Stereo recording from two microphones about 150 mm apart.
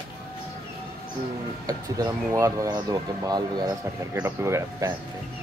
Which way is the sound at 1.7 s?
25° right (ahead or behind).